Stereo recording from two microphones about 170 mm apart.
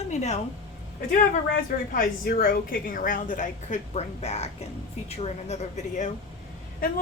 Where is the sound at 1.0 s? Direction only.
55° left (ahead or behind).